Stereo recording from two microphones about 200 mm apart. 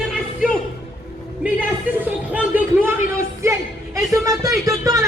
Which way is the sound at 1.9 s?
10° right (ahead or behind).